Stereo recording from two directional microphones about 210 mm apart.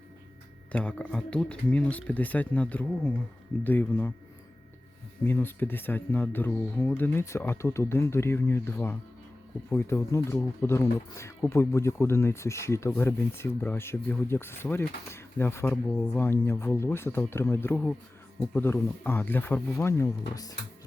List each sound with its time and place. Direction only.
0.7 s speech: 5° left (ahead or behind)
5.2 s speech: 10° left (ahead or behind)